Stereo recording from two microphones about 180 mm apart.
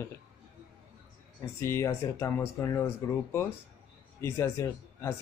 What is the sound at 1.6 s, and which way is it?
Speech, 15° left (ahead or behind).